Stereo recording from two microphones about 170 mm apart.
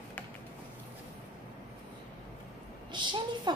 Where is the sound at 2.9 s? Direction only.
25° right (ahead or behind).